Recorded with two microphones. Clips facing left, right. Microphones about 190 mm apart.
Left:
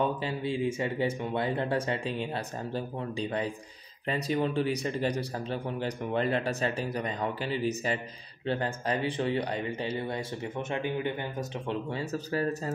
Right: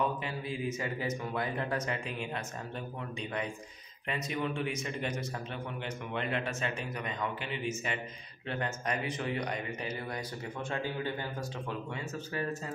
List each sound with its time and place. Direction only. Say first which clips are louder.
0.0 s a man's voice: left 4 dB; 30° left (ahead or behind)